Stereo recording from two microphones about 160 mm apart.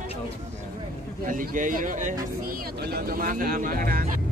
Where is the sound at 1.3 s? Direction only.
55° right (ahead or behind).